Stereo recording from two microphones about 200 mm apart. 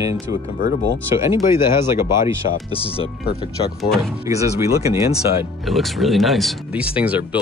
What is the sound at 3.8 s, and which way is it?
Speech, centre (ahead or behind).